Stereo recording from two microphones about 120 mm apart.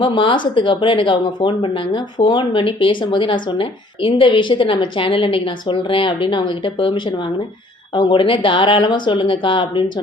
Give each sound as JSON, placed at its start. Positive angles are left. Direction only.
{"t": 0.0, "sound": "speech", "side_deg": 45}